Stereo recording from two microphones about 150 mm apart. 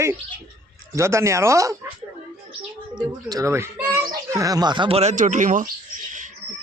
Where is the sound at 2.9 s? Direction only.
25° right (ahead or behind).